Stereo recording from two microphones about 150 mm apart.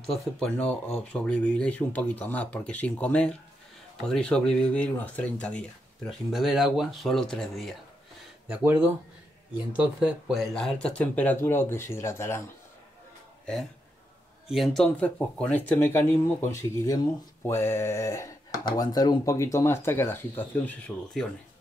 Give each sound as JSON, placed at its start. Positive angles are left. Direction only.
{"t": 0.0, "sound": "speech", "side_deg": 0}
{"t": 8.5, "sound": "speech", "side_deg": -15}
{"t": 14.5, "sound": "speech", "side_deg": 0}